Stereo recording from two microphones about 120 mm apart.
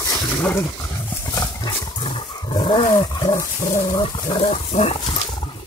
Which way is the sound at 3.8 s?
35° left (ahead or behind).